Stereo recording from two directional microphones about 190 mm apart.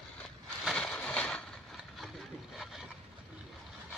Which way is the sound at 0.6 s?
5° left (ahead or behind).